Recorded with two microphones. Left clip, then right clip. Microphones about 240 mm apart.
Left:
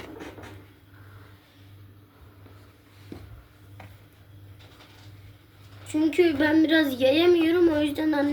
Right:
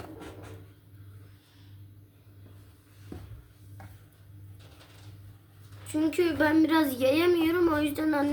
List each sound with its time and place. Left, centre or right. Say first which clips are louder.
6.1 s speech: left 4 dB; centre